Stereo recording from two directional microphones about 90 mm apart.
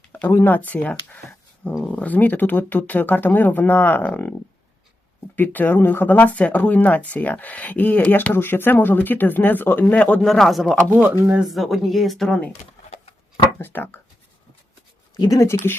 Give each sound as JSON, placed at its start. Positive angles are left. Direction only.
{"t": 0.1, "sound": "speech", "side_deg": 20}
{"t": 5.4, "sound": "speech", "side_deg": 20}
{"t": 10.2, "sound": "speech", "side_deg": 0}
{"t": 13.6, "sound": "speech", "side_deg": 20}
{"t": 15.1, "sound": "speech", "side_deg": 45}